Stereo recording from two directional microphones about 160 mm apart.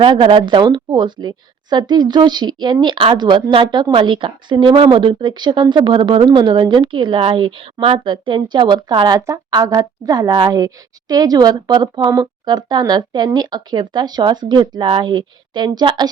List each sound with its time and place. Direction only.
0.0 s a woman's voice: 30° right (ahead or behind)